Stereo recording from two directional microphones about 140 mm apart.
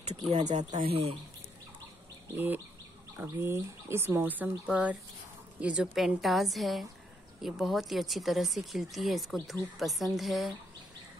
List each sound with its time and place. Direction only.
0.3 s speech: 55° right (ahead or behind)
0.8 s speech: 45° right (ahead or behind)
2.3 s speech: 15° right (ahead or behind)